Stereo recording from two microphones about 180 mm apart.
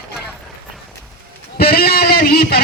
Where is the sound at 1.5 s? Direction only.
55° left (ahead or behind).